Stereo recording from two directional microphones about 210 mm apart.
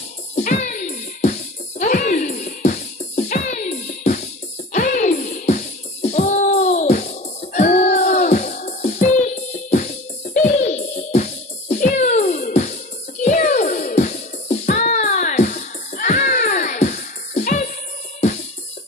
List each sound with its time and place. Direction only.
0.4 s music: 35° left (ahead or behind)